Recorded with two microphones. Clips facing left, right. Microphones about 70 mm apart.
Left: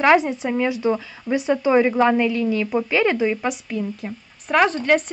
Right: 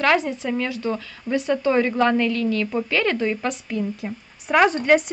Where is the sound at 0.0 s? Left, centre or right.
Left.